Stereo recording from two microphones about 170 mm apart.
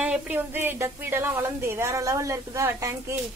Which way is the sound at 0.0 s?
10° right (ahead or behind).